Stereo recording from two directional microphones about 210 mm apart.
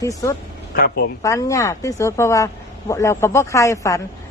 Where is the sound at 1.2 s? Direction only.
15° left (ahead or behind).